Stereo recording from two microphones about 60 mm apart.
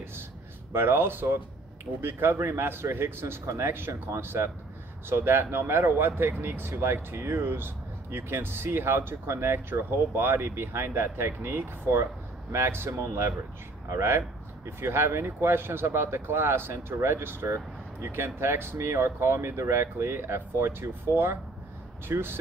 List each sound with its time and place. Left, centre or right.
0.7 s speech: right